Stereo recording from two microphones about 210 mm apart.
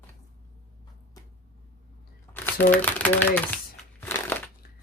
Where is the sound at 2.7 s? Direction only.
5° left (ahead or behind).